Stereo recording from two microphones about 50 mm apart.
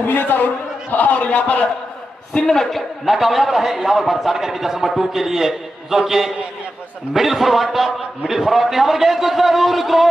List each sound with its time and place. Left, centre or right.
0.0 s a man's voice: left
2.3 s a man's voice: centre